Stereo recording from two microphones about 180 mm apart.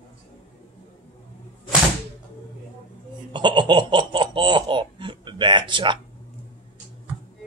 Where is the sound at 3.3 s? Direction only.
25° right (ahead or behind).